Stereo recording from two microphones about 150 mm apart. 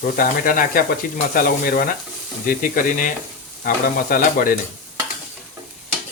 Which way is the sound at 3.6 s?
70° left (ahead or behind).